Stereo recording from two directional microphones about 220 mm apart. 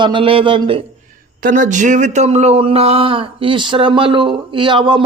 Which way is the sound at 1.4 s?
35° right (ahead or behind).